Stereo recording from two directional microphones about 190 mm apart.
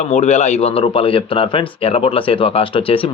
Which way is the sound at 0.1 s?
35° left (ahead or behind).